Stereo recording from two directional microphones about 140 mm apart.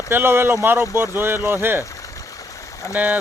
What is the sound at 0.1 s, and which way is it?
Speech, 15° right (ahead or behind).